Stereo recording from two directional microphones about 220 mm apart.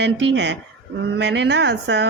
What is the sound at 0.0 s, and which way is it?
Speech, 55° right (ahead or behind).